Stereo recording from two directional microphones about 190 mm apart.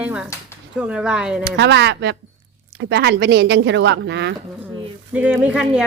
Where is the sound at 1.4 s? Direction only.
65° right (ahead or behind).